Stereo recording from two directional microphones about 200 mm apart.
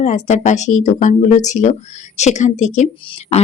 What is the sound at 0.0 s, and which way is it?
Speech, 35° left (ahead or behind).